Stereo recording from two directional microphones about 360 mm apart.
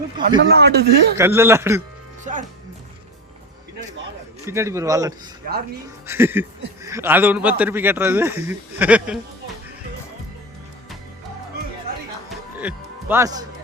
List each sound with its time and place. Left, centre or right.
0.2 s speech: right
1.1 s a man's voice: centre
4.4 s a man's voice: centre
12.5 s music: centre